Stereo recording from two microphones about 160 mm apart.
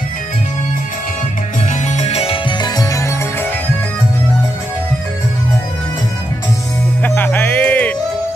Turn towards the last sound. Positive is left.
turn(degrees=10)  # may be behind; listen again after turning